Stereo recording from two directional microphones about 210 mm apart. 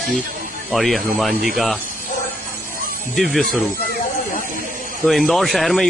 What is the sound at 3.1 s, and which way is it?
Speech, centre (ahead or behind).